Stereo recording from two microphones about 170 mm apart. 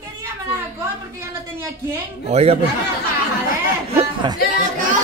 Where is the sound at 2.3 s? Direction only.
40° right (ahead or behind).